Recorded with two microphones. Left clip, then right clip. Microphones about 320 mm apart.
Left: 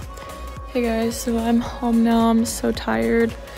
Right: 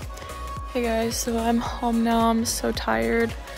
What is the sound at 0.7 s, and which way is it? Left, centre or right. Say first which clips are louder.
Speech: left 2 dB; centre.